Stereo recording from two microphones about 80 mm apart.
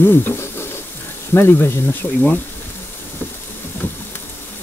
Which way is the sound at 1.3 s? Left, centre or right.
Left.